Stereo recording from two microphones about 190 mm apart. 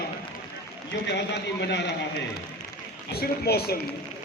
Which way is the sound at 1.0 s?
65° left (ahead or behind).